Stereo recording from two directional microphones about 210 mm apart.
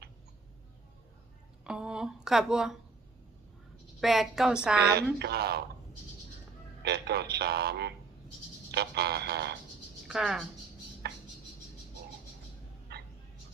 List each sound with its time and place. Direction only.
1.6 s a woman's voice: 5° right (ahead or behind)
4.0 s a woman's voice: centre (ahead or behind)
5.2 s speech: 50° right (ahead or behind)
6.8 s speech: 50° right (ahead or behind)
10.1 s speech: centre (ahead or behind)
11.0 s cricket: 50° right (ahead or behind)
12.9 s a sound: 50° right (ahead or behind)